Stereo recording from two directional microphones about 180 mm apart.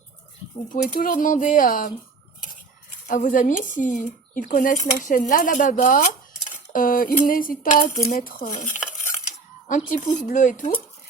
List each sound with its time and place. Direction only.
0.7 s speech: 50° left (ahead or behind)
3.1 s speech: 45° left (ahead or behind)
9.6 s speech: 45° left (ahead or behind)